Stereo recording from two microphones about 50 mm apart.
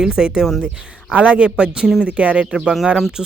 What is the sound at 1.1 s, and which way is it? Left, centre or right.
Speech, right.